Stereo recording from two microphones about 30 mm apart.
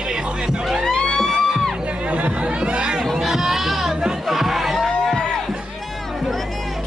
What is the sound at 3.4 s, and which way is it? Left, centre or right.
Goat, centre.